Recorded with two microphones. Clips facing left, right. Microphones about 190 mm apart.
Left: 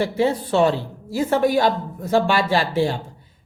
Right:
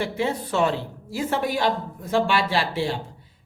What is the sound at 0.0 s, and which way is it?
A woman's voice, 35° left (ahead or behind).